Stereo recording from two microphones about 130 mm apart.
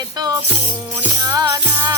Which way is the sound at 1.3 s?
30° right (ahead or behind).